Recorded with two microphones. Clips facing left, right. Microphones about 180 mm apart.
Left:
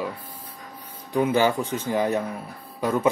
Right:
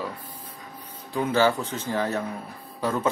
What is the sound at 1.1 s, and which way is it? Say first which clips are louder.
A man's voice: left 2 dB; 15° left (ahead or behind).